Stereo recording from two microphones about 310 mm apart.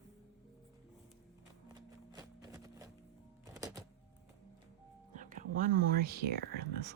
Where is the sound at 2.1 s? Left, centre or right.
Centre.